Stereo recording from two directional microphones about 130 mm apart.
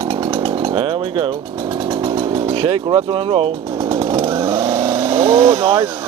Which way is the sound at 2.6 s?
45° right (ahead or behind).